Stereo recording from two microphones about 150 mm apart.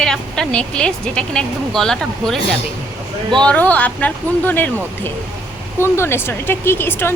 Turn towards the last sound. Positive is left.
turn(degrees=15)  # may be behind; listen again after turning